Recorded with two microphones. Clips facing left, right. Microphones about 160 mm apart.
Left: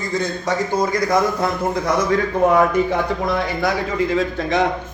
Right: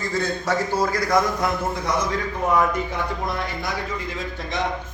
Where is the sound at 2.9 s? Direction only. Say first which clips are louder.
Left 7 dB; 80° left.